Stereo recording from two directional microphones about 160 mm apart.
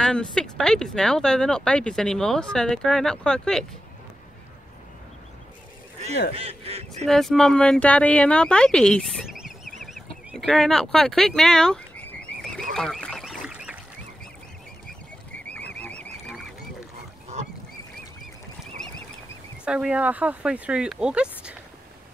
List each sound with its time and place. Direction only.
0.0 s speech: 5° left (ahead or behind)
6.3 s goose: 40° right (ahead or behind)
7.1 s speech: centre (ahead or behind)
12.7 s goose: 5° left (ahead or behind)
15.8 s a sound: 10° left (ahead or behind)
19.6 s speech: 5° right (ahead or behind)